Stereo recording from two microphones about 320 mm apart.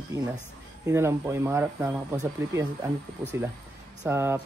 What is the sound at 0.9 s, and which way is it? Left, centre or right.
Speech, centre.